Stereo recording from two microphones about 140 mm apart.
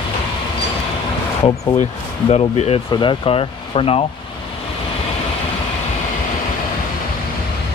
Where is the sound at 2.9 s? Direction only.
35° left (ahead or behind).